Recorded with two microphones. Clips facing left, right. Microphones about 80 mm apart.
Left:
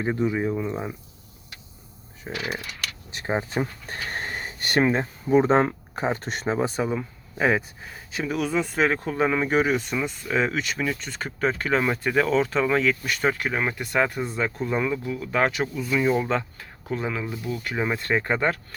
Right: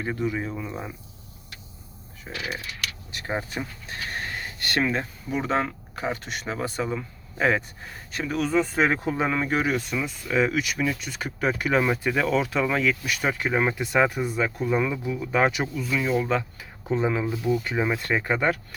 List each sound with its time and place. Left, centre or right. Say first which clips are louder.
0.0 s speech: left 4 dB; centre
2.3 s speech: left 2 dB; centre
3.6 s speech: left 5 dB; left
6.7 s speech: left 2 dB; centre
13.3 s speech: right 2 dB; centre
15.7 s speech: left 2 dB; centre
16.3 s speech: even; centre
16.8 s speech: right 4 dB; centre
17.7 s speech: even; centre